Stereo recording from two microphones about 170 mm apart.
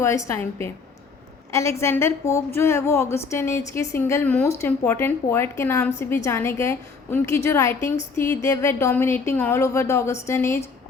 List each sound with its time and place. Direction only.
0.0 s a woman's voice: 15° left (ahead or behind)